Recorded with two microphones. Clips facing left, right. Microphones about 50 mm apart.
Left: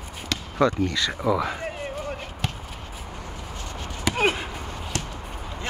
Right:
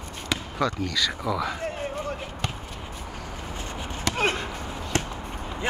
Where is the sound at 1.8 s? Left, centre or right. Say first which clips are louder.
Right 1 dB; centre.